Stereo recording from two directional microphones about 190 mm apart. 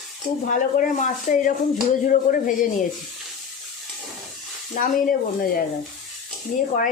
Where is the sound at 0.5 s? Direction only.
40° left (ahead or behind).